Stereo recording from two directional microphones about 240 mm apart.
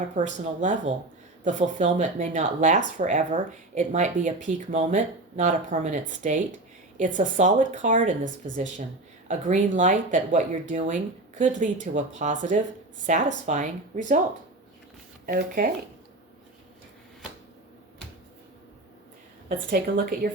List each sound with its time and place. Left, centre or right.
0.2 s speech: right
15.3 s speech: right
19.5 s speech: right